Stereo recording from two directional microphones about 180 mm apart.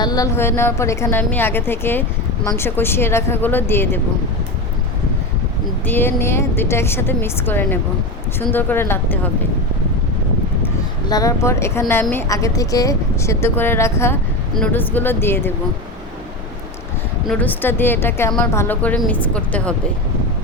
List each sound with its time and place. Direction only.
0.0 s a woman's voice: 20° left (ahead or behind)
5.8 s a woman's voice: 10° left (ahead or behind)
11.1 s a woman's voice: 20° left (ahead or behind)
17.2 s a woman's voice: 10° left (ahead or behind)